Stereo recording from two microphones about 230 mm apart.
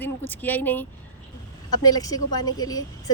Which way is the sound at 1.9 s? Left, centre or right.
Centre.